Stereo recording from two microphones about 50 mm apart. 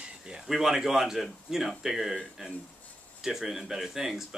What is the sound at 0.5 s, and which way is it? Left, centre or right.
Speech, centre.